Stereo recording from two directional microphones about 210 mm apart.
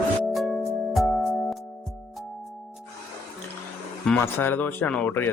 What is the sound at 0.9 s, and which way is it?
Music, centre (ahead or behind).